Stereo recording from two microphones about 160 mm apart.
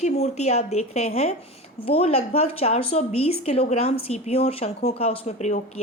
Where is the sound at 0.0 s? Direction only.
45° left (ahead or behind).